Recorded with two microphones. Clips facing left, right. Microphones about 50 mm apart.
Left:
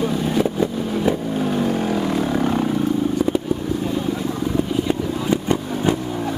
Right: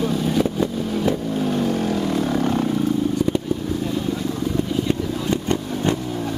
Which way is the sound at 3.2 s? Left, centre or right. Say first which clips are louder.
Left 1 dB; centre.